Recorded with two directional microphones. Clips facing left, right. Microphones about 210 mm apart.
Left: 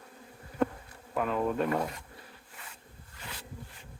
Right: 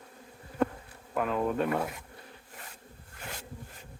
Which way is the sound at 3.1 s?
50° right (ahead or behind).